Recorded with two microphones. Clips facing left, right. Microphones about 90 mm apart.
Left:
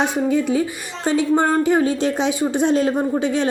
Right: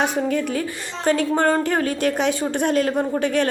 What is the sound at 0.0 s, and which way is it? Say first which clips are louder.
A woman's voice: left 2 dB; 20° left (ahead or behind).